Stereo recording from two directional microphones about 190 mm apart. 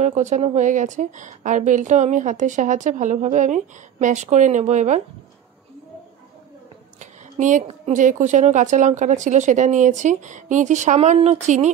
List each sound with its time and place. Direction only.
0.0 s a woman's voice: 40° right (ahead or behind)
7.0 s a woman's voice: 40° right (ahead or behind)